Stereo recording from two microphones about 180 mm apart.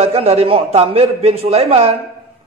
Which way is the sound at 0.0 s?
35° right (ahead or behind).